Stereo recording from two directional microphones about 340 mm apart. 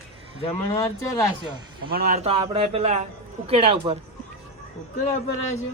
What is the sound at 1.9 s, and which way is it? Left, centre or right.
A man's voice, right.